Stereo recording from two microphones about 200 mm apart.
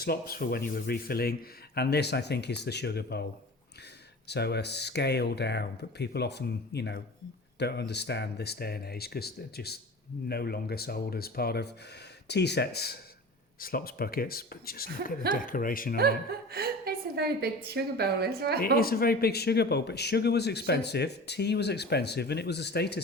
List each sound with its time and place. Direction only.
0.0 s speech: 50° left (ahead or behind)
4.3 s a man's voice: 55° left (ahead or behind)
16.0 s a woman's voice: 50° right (ahead or behind)
18.6 s a man's voice: 45° left (ahead or behind)